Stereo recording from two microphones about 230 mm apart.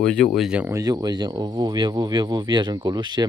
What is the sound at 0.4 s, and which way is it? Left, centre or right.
Speech, centre.